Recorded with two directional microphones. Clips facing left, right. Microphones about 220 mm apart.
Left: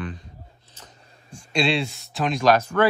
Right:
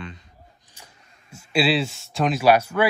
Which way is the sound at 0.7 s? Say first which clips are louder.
Left 4 dB; 10° right (ahead or behind).